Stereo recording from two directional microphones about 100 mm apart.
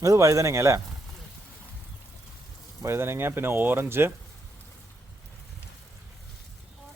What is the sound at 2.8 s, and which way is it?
Speech, 25° right (ahead or behind).